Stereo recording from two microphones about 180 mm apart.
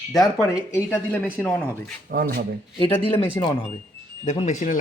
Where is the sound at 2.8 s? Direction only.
30° left (ahead or behind).